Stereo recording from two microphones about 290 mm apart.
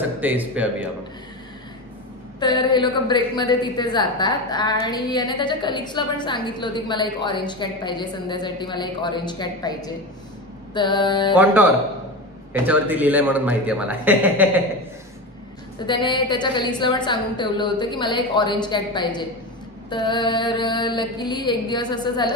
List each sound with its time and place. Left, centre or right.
0.2 s speech: centre
2.4 s a woman's voice: centre
11.3 s speech: centre
15.9 s a woman's voice: centre